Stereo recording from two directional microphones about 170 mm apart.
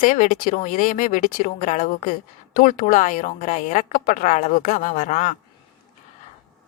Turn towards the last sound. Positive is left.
turn(degrees=45)  # may be behind; listen again after turning